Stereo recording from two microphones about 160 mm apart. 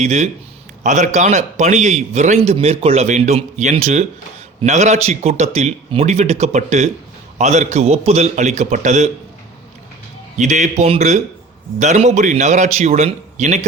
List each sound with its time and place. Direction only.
0.0 s a man's voice: 45° right (ahead or behind)
10.3 s a man's voice: 50° right (ahead or behind)